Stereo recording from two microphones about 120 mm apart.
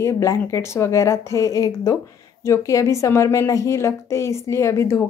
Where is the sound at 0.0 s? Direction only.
25° left (ahead or behind).